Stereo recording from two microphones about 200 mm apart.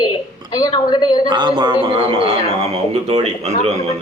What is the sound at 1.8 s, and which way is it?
Speech, 25° right (ahead or behind).